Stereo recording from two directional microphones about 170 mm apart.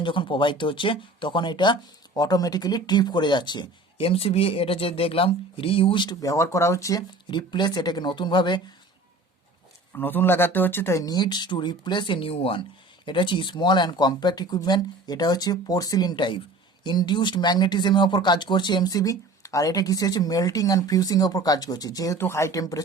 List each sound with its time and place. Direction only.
0.0 s speech: 30° left (ahead or behind)
9.9 s speech: 10° left (ahead or behind)